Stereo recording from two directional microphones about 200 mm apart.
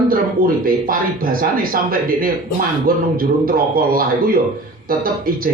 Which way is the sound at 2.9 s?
45° right (ahead or behind).